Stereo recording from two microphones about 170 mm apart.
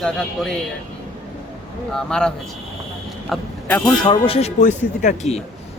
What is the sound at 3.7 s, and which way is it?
Speech, 20° left (ahead or behind).